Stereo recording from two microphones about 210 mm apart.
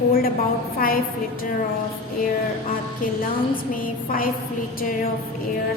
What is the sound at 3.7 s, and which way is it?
Speech, 40° left (ahead or behind).